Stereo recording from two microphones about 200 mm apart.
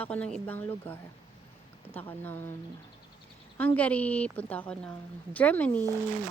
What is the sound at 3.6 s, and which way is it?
Speech, 10° left (ahead or behind).